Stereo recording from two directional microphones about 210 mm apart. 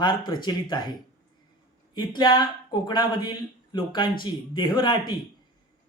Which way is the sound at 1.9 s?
20° left (ahead or behind).